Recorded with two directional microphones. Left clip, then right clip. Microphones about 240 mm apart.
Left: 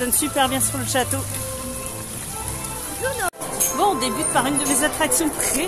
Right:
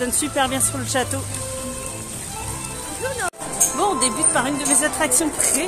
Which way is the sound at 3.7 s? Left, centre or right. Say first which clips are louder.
Left 2 dB; centre.